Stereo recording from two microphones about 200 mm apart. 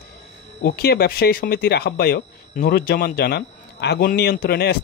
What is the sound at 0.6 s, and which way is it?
Speech, 50° left (ahead or behind).